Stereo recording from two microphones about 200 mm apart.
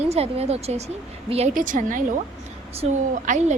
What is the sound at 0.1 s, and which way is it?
A woman's voice, 30° right (ahead or behind).